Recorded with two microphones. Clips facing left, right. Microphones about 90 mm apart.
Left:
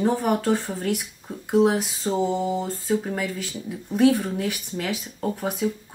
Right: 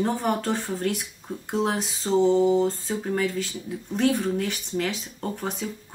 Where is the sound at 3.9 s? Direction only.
5° left (ahead or behind).